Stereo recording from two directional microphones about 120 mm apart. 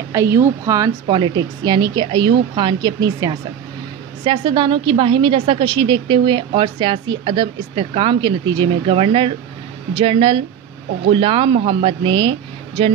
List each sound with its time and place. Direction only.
0.1 s a woman's voice: 25° right (ahead or behind)
1.0 s a woman's voice: 40° right (ahead or behind)